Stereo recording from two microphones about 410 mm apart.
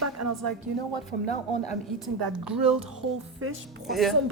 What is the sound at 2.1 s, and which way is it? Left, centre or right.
Speech, right.